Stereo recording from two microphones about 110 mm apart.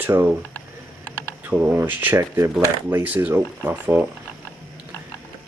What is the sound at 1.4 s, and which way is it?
Speech, 15° right (ahead or behind).